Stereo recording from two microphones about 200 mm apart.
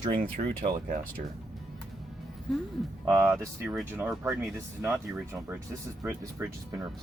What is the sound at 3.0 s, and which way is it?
Speech, 15° right (ahead or behind).